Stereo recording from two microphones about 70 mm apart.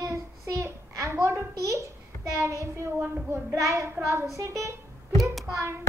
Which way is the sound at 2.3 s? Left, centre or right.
Right.